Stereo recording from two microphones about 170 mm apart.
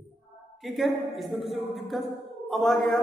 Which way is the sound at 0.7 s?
Centre (ahead or behind).